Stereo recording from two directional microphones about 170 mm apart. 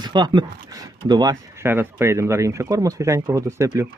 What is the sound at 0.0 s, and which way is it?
Speech, 25° right (ahead or behind).